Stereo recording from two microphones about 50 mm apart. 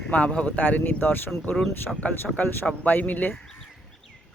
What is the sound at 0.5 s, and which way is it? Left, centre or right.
Speech, left.